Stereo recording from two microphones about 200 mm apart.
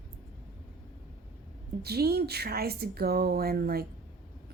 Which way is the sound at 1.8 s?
50° right (ahead or behind).